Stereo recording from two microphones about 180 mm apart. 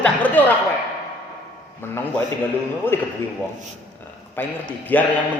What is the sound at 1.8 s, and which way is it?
Speech, 10° left (ahead or behind).